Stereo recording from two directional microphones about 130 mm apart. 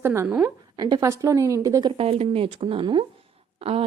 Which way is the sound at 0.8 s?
30° right (ahead or behind).